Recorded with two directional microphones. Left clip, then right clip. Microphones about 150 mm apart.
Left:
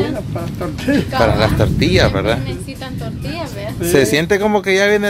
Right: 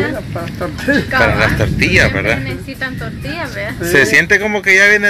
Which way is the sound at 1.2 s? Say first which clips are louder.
Even; 30° left (ahead or behind).